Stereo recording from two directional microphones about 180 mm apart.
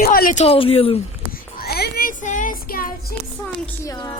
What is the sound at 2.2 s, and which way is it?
Child singing, 45° left (ahead or behind).